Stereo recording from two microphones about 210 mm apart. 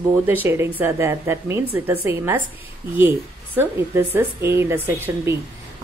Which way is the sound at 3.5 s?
10° right (ahead or behind).